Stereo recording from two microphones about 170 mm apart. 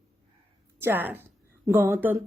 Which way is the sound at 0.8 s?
10° right (ahead or behind).